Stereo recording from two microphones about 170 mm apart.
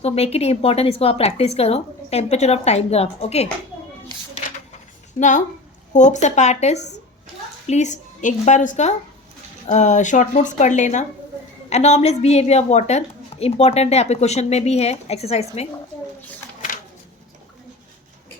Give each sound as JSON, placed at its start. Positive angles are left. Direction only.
{"t": 0.0, "sound": "a woman's voice", "side_deg": 35}
{"t": 5.2, "sound": "a woman's voice", "side_deg": 55}